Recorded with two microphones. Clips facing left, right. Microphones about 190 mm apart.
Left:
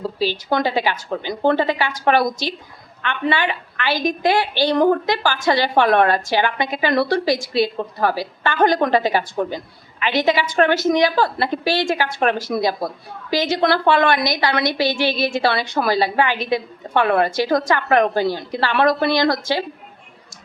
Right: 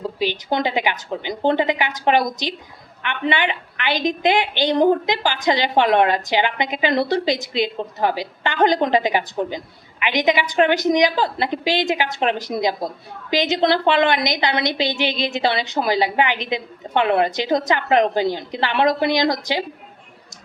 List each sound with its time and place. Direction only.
0.0 s a woman's voice: 15° right (ahead or behind)